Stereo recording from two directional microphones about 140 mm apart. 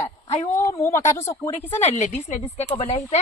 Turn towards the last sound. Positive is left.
turn(degrees=45)  # may be behind; listen again after turning